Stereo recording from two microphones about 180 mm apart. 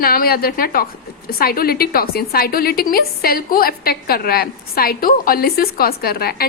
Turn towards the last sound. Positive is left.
turn(degrees=60)  # may be behind; listen again after turning